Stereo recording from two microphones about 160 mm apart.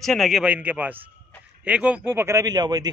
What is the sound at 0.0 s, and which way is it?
A man's voice, centre (ahead or behind).